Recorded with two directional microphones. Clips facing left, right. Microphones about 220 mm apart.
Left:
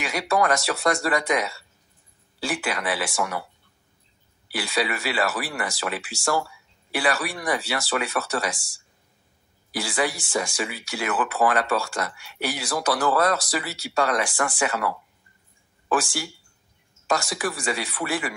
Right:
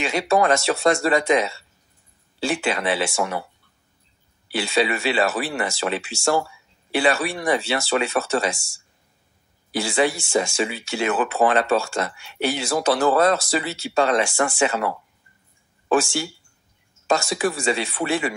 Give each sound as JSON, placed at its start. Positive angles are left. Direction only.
{"t": 0.0, "sound": "speech", "side_deg": -25}
{"t": 4.5, "sound": "speech", "side_deg": -25}